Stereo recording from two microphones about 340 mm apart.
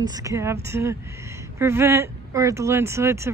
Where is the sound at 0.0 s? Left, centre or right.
Centre.